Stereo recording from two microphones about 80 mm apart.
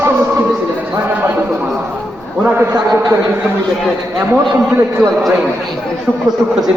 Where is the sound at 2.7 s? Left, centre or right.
Right.